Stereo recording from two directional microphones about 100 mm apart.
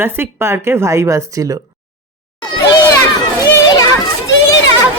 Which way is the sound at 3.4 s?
35° left (ahead or behind).